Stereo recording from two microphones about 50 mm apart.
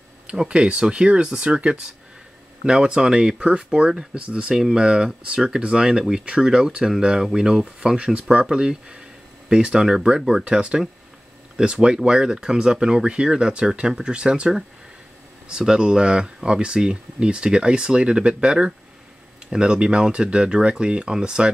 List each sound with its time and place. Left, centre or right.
0.3 s speech: centre